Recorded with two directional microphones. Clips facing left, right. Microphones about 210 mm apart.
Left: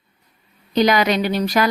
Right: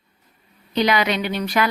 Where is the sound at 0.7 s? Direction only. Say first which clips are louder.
Left 3 dB; 40° left (ahead or behind).